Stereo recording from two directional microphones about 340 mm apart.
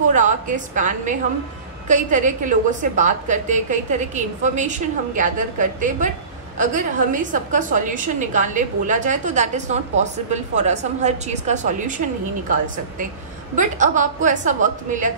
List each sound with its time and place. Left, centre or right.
0.1 s a woman's voice: right
13.6 s a woman's voice: right